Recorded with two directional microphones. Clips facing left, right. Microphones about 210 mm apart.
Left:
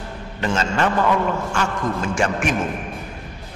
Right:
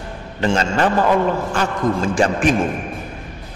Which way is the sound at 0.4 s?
35° right (ahead or behind).